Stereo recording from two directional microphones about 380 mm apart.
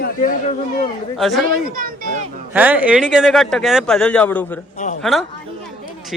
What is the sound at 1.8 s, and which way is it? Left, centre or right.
Speech, right.